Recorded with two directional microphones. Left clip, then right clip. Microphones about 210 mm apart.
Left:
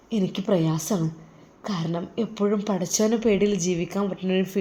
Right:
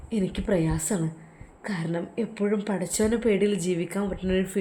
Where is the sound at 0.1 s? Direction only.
10° left (ahead or behind).